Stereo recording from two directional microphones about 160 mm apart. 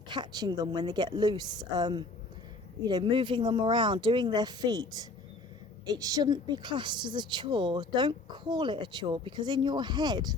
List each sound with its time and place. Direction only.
0.1 s speech: 25° right (ahead or behind)